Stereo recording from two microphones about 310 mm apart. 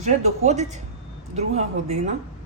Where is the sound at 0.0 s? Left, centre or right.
Right.